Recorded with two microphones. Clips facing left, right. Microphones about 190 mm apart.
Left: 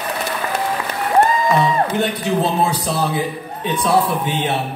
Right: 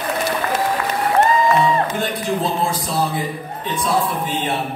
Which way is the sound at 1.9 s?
70° left (ahead or behind).